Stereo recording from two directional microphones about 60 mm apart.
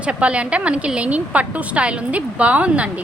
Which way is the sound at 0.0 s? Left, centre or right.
Centre.